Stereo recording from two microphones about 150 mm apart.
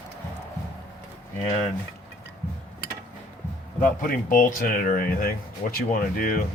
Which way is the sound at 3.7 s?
65° left (ahead or behind).